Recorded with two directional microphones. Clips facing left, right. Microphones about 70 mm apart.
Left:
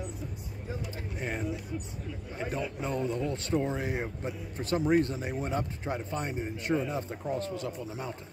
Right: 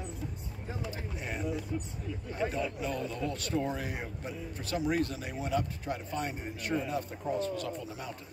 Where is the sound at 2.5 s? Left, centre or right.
Left.